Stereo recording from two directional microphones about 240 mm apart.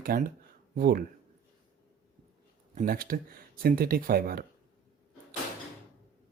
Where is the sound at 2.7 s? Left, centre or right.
Right.